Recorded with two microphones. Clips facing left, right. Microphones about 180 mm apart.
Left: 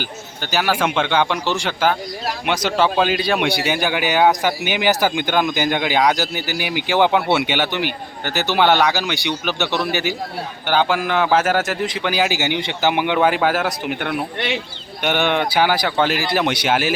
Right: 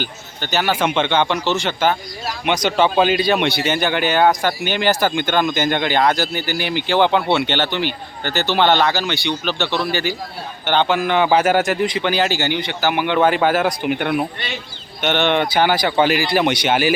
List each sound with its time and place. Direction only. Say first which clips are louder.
0.0 s a man's voice: right 1 dB; 5° left (ahead or behind)
13.1 s a man's voice: right 2 dB; 5° left (ahead or behind)
14.3 s speech: left 6 dB; 70° left (ahead or behind)
15.0 s a man's voice: right 1 dB; 5° left (ahead or behind)